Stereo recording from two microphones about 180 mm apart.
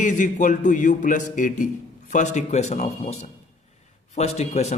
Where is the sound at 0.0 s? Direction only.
45° left (ahead or behind).